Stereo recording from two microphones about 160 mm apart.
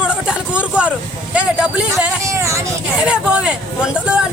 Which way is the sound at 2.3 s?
20° right (ahead or behind).